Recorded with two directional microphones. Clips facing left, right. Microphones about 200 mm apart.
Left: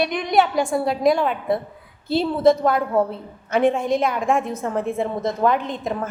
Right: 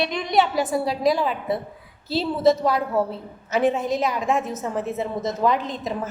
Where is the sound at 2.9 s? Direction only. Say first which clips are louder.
Left 3 dB; 5° right (ahead or behind).